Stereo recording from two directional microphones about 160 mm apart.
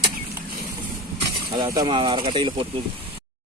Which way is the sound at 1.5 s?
25° right (ahead or behind).